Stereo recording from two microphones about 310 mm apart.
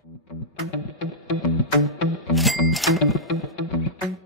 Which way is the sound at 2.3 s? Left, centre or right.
Centre.